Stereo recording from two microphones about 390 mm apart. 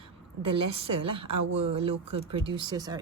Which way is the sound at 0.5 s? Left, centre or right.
Centre.